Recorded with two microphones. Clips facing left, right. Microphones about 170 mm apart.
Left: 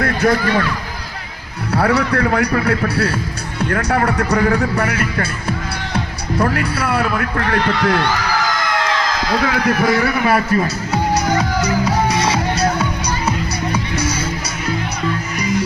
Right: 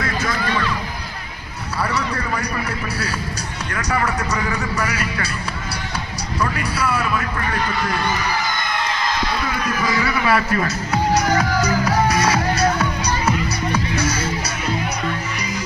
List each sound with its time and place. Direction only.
0.0 s speech: 60° left (ahead or behind)
1.7 s a man's voice: 60° left (ahead or behind)
11.3 s music: 20° left (ahead or behind)